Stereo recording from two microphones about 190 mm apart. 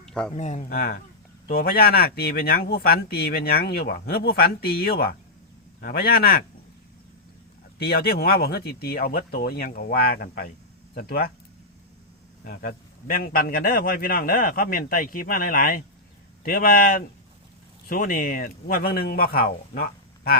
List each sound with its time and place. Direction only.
0.0 s a sound: 5° left (ahead or behind)
0.3 s speech: 40° left (ahead or behind)
7.9 s speech: 55° left (ahead or behind)
12.5 s speech: 55° left (ahead or behind)